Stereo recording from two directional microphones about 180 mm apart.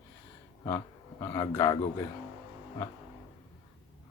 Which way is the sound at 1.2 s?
20° left (ahead or behind).